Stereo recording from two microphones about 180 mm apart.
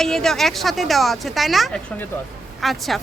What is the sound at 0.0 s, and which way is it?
Speech, centre (ahead or behind).